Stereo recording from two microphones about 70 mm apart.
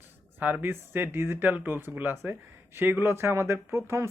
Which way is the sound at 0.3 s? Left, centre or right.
Right.